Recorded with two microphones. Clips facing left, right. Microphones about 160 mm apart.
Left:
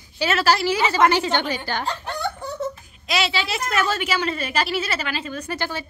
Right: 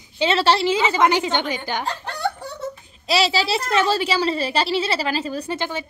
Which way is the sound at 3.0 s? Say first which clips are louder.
Right 4 dB; 35° right (ahead or behind).